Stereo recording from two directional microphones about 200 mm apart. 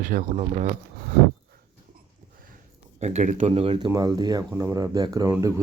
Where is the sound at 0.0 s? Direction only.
40° right (ahead or behind).